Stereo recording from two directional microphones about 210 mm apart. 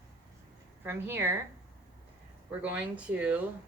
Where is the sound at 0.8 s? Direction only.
10° right (ahead or behind).